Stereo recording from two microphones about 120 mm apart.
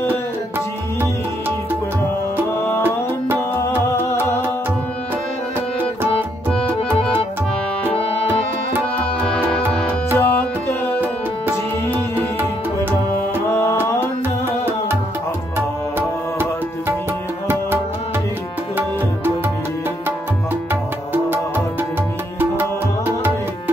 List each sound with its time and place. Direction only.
7.9 s music: 55° left (ahead or behind)
10.1 s music: 20° left (ahead or behind)
13.5 s music: 20° left (ahead or behind)
22.4 s music: 15° right (ahead or behind)